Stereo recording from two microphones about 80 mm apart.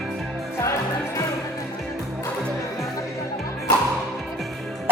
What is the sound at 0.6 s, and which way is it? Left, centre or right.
Music, left.